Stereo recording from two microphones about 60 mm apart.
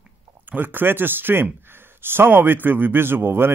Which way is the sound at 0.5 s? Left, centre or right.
Right.